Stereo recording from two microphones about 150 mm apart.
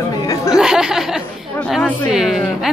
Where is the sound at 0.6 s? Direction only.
5° right (ahead or behind).